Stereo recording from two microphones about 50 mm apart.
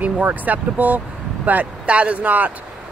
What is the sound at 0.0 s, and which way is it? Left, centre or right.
Speech, right.